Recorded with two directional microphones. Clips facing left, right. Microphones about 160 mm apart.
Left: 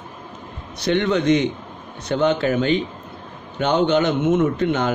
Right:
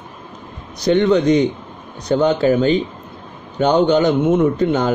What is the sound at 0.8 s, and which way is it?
A man's voice, 35° right (ahead or behind).